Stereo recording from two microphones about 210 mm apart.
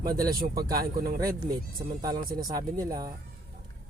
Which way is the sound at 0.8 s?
45° right (ahead or behind).